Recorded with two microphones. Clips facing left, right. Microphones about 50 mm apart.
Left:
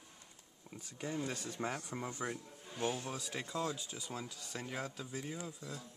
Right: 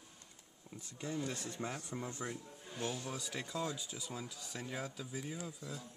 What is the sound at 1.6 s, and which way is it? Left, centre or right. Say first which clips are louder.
Speech: left 3 dB; left.